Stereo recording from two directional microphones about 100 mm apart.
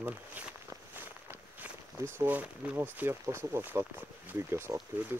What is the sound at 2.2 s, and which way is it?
Speech, 15° right (ahead or behind).